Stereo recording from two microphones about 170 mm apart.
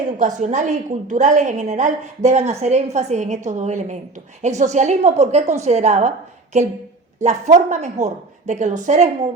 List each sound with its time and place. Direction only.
0.2 s a woman's voice: 45° right (ahead or behind)